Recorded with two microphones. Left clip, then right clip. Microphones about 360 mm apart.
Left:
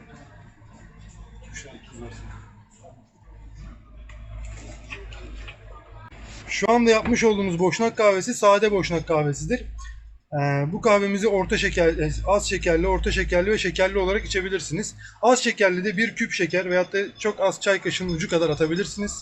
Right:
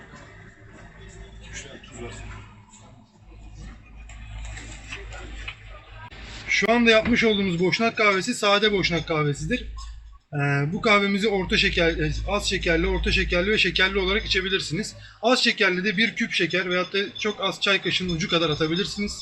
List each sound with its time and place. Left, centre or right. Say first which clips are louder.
6.5 s speech: even; centre